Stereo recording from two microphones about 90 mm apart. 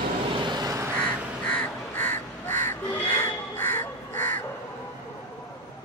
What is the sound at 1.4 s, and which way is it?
Crow, 20° left (ahead or behind).